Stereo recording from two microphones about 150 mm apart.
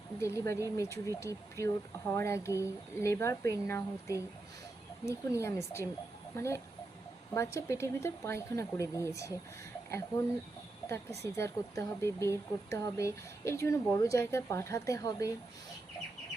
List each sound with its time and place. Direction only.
0.2 s speech: 20° left (ahead or behind)
10.8 s speech: 20° left (ahead or behind)